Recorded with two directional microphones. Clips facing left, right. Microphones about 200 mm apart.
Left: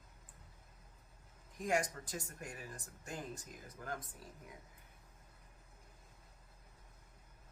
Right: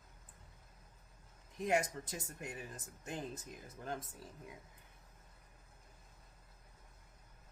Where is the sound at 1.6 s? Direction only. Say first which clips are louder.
Right 2 dB; 25° right (ahead or behind).